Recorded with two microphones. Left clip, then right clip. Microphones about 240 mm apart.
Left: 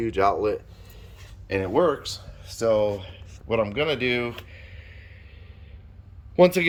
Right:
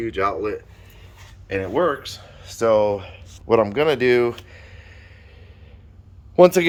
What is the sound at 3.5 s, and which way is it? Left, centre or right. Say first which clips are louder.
Speech: right 7 dB; right.